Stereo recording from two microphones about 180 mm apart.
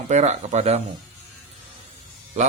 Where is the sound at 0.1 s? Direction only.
40° right (ahead or behind).